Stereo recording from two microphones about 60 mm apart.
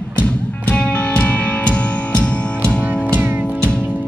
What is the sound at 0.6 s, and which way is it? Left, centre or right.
Music, left.